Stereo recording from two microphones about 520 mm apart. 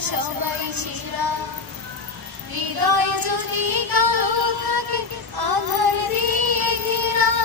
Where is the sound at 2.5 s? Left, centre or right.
Right.